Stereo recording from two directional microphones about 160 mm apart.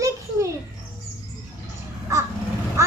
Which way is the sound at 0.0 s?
20° right (ahead or behind).